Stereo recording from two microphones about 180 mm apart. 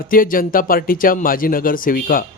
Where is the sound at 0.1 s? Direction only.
50° left (ahead or behind).